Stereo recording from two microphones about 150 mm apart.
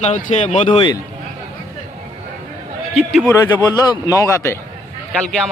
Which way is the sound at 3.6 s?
25° left (ahead or behind).